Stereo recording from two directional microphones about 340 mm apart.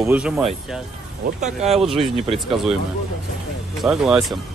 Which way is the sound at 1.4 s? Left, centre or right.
Centre.